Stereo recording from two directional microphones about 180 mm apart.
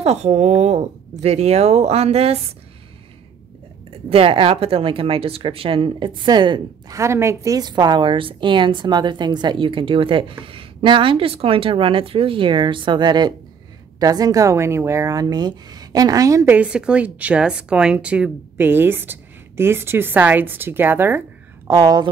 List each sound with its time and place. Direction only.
0.0 s speech: 35° right (ahead or behind)
4.1 s speech: 30° right (ahead or behind)
7.0 s a woman's voice: 15° right (ahead or behind)